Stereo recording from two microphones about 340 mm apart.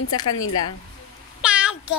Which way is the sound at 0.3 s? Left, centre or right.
Left.